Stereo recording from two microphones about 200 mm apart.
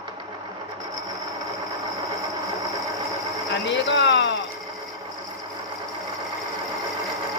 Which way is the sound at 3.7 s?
60° left (ahead or behind).